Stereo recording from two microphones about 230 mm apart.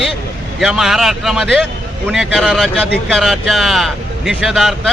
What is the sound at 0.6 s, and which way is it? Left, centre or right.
Speech, centre.